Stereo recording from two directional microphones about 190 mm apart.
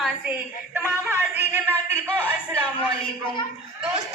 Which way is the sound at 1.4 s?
10° right (ahead or behind).